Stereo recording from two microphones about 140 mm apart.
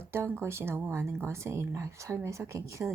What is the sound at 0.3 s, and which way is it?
Speech, 20° right (ahead or behind).